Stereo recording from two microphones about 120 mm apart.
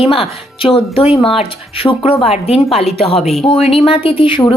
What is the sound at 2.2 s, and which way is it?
Speech, 60° left (ahead or behind).